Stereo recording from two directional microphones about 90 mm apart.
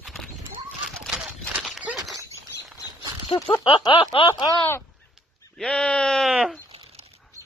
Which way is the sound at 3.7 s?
85° left.